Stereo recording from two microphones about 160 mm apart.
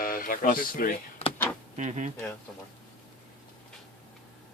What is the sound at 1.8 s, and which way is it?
Speech, 50° right (ahead or behind).